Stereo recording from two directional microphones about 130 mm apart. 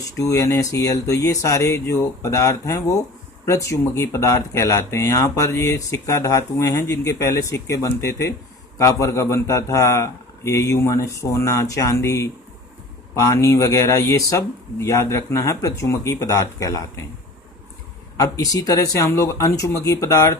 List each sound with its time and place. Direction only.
0.2 s speech: 25° left (ahead or behind)
18.2 s speech: 25° left (ahead or behind)